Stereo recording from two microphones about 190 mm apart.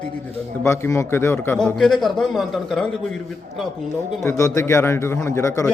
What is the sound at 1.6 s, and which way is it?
A man's voice, centre (ahead or behind).